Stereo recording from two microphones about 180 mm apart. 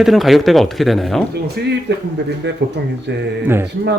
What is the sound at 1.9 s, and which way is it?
Speech, 75° right (ahead or behind).